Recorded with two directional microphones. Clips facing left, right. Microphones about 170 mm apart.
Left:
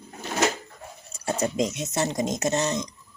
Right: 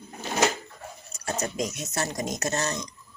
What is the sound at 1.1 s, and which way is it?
Speech, 30° left (ahead or behind).